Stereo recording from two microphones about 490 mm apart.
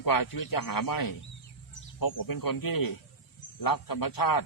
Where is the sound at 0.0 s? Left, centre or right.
Left.